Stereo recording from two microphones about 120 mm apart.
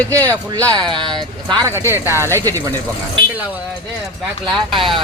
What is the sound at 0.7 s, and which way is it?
Speech, 40° right (ahead or behind).